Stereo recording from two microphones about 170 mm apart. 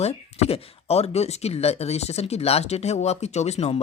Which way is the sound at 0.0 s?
40° left (ahead or behind).